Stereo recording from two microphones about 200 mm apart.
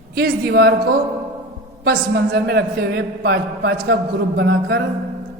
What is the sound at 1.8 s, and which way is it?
A man's voice, 50° right (ahead or behind).